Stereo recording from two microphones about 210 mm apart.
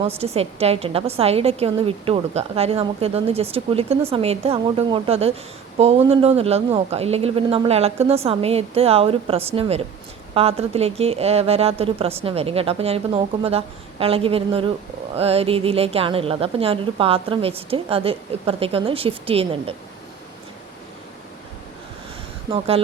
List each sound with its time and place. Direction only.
0.2 s a woman's voice: 30° right (ahead or behind)
22.5 s a woman's voice: 30° right (ahead or behind)